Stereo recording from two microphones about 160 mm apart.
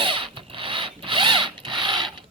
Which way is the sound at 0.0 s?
30° right (ahead or behind).